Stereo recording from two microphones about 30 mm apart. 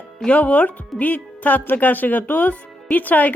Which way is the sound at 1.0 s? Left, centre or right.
Left.